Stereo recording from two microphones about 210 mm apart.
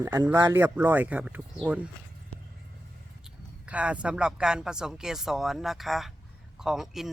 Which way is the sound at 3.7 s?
5° right (ahead or behind).